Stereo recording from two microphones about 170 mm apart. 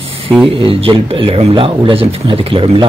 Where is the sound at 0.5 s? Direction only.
35° right (ahead or behind).